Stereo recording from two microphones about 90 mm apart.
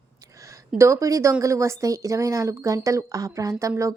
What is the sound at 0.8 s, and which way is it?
A woman's voice, 35° right (ahead or behind).